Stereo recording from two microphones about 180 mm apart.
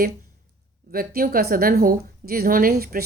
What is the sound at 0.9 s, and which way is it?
A woman's voice, 55° right (ahead or behind).